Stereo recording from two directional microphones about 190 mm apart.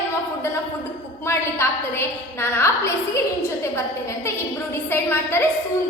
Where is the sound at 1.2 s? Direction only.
15° left (ahead or behind).